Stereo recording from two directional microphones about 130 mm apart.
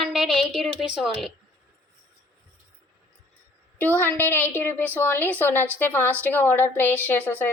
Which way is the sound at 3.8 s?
15° left (ahead or behind).